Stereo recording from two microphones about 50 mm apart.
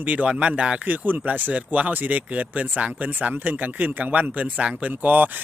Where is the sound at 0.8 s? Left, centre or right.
Right.